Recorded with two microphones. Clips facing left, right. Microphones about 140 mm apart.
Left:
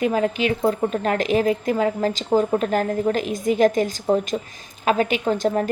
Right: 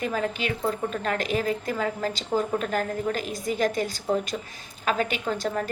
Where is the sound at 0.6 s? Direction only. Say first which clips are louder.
Left 5 dB; 40° left (ahead or behind).